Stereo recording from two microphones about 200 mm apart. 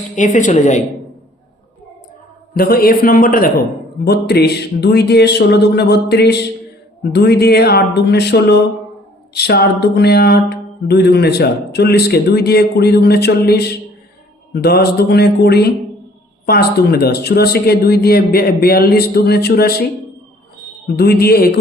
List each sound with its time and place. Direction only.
0.2 s a woman's voice: 40° left (ahead or behind)
2.6 s mantra: 50° left (ahead or behind)
4.0 s speech: 55° left (ahead or behind)
9.3 s mantra: 55° left (ahead or behind)
20.8 s mantra: 55° left (ahead or behind)